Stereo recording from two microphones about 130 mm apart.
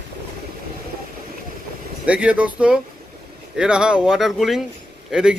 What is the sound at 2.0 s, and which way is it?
A man's voice, 10° right (ahead or behind).